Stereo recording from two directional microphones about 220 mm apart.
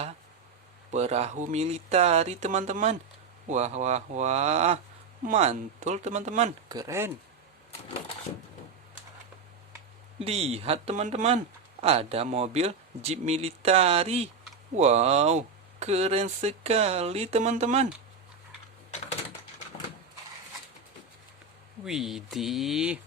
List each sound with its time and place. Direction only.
0.9 s speech: 30° right (ahead or behind)
6.7 s speech: 15° right (ahead or behind)
10.2 s speech: 25° right (ahead or behind)
21.8 s speech: centre (ahead or behind)